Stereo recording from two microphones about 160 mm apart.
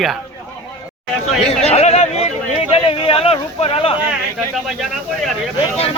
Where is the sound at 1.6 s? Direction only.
40° left (ahead or behind).